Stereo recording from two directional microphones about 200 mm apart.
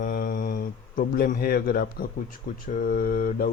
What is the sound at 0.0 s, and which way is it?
Mantra, 45° left (ahead or behind).